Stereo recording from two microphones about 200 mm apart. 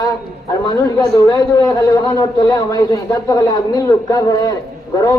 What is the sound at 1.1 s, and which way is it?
A man's voice, 15° left (ahead or behind).